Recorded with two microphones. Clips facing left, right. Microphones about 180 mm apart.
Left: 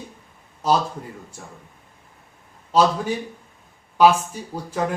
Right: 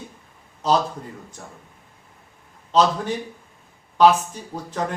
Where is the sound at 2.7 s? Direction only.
10° left (ahead or behind).